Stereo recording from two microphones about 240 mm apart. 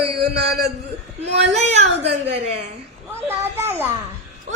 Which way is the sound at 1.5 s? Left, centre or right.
Right.